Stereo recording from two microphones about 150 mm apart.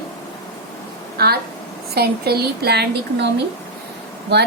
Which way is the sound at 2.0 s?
90° right.